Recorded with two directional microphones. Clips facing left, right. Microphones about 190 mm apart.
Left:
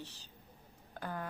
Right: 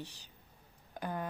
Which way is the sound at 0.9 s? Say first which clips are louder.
Right 3 dB; 20° right (ahead or behind).